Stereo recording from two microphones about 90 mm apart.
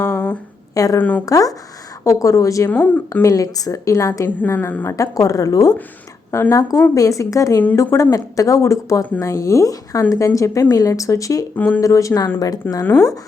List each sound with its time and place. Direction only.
0.0 s a sound: 30° left (ahead or behind)
0.7 s a woman's voice: 40° left (ahead or behind)
0.9 s speech: 20° left (ahead or behind)
1.2 s a woman's voice: 40° left (ahead or behind)
2.6 s speech: 20° left (ahead or behind)
3.1 s a woman's voice: 35° left (ahead or behind)
11.5 s speech: 20° left (ahead or behind)
11.8 s a woman's voice: 35° left (ahead or behind)
12.6 s speech: 25° left (ahead or behind)